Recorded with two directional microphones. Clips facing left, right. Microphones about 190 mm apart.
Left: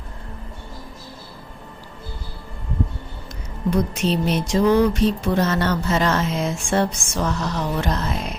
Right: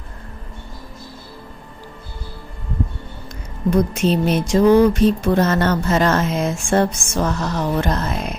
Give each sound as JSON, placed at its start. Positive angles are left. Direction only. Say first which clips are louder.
{"t": 3.7, "sound": "speech", "louder": "right 4 dB", "side_deg": -50}